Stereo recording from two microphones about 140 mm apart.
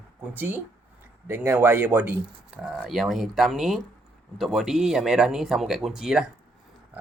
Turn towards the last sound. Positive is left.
turn(degrees=-5)  # may be behind; listen again after turning